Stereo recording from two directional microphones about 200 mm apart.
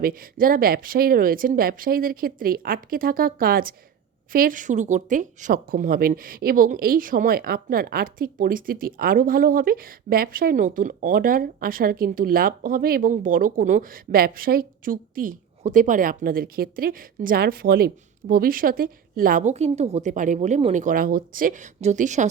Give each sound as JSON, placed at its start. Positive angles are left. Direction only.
{"t": 0.0, "sound": "a woman's voice", "side_deg": -45}